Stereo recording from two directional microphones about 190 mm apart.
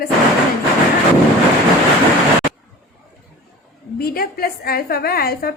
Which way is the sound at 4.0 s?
55° left (ahead or behind).